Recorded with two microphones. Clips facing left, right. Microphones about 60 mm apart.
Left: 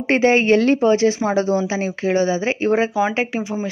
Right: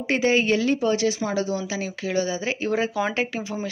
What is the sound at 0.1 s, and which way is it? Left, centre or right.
Speech, left.